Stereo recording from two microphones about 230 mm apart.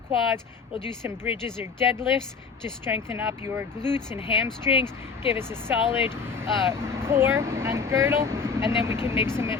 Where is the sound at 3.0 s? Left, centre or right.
Centre.